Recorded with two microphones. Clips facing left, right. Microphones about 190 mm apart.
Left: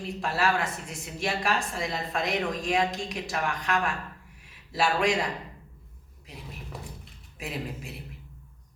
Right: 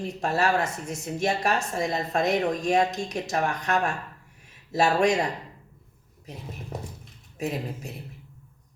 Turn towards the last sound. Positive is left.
turn(degrees=-45)  # may be behind; listen again after turning